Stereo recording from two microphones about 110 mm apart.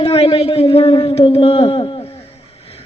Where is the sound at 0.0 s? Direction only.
60° left (ahead or behind).